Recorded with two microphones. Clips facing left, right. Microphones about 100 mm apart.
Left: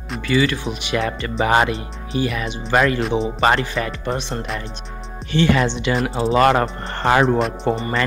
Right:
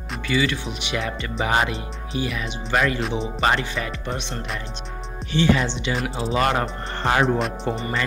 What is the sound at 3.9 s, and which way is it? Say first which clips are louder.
Speech: left 5 dB; 40° left (ahead or behind).